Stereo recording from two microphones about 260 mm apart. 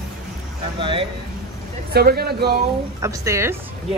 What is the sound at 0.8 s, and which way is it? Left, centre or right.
Speech, centre.